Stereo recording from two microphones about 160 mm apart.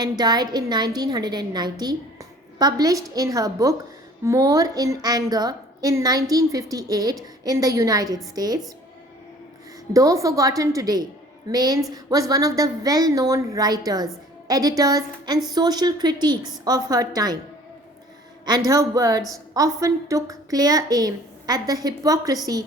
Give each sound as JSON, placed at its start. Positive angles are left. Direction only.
{"t": 0.0, "sound": "a woman's voice", "side_deg": -25}
{"t": 9.9, "sound": "a woman's voice", "side_deg": -20}
{"t": 18.4, "sound": "a woman's voice", "side_deg": -25}